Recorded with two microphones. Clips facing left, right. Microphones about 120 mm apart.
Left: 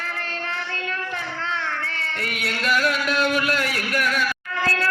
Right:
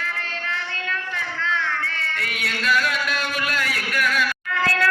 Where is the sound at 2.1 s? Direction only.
45° left (ahead or behind).